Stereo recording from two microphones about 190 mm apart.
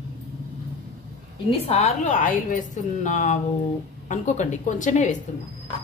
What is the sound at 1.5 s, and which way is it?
A woman's voice, 30° left (ahead or behind).